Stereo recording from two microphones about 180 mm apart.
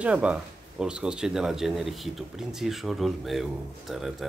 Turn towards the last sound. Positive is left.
turn(degrees=0)  # may be behind; listen again after turning